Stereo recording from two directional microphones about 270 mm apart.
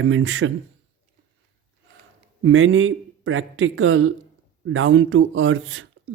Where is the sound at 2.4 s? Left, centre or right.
Right.